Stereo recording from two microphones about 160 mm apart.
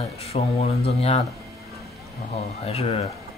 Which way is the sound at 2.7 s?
40° left (ahead or behind).